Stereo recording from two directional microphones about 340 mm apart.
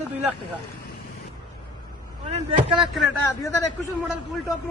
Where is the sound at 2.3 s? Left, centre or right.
Centre.